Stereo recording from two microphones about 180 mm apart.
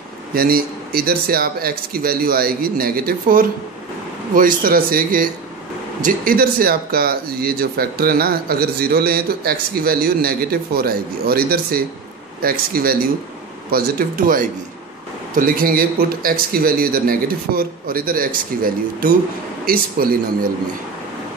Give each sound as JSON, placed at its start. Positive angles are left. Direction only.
{"t": 0.3, "sound": "a man's voice", "side_deg": -55}